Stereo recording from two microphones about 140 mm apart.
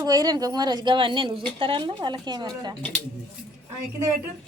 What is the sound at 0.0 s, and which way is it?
Speech, 25° right (ahead or behind).